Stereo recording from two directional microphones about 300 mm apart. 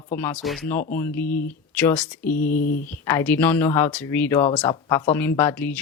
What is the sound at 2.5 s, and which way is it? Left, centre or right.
Speech, left.